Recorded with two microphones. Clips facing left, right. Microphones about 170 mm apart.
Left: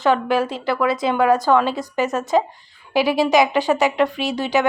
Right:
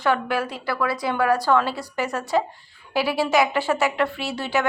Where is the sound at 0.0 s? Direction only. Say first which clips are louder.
Left 5 dB; 20° left (ahead or behind).